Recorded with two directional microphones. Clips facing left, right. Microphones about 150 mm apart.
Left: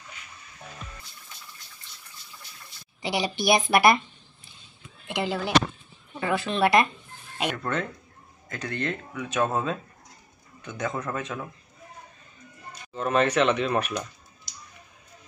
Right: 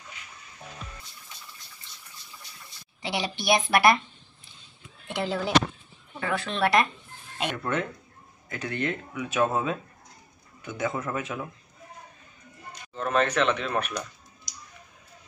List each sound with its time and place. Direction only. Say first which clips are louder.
3.0 s a woman's voice: left 3 dB; centre (ahead or behind)
5.0 s a woman's voice: even; 5° left (ahead or behind)
7.5 s a woman's voice: even; 5° right (ahead or behind)
12.9 s speech: left 2 dB; 5° left (ahead or behind)